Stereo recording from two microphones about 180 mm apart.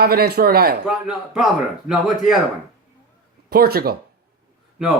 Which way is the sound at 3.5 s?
60° right (ahead or behind).